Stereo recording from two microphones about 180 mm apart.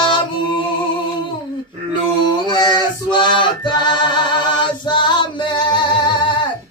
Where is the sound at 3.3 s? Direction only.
25° left (ahead or behind).